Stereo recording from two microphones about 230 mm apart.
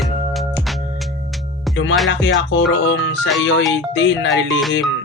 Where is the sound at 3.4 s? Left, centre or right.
Left.